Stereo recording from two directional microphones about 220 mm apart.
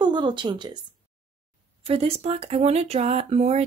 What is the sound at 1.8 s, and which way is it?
A woman's voice, 25° right (ahead or behind).